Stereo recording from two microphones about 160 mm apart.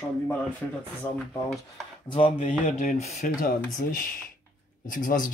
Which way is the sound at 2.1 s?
35° left (ahead or behind).